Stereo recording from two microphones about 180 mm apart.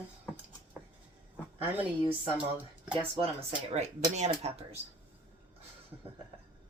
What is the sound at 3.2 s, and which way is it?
Speech, 35° right (ahead or behind).